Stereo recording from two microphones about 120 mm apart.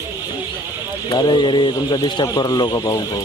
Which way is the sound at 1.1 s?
40° left (ahead or behind).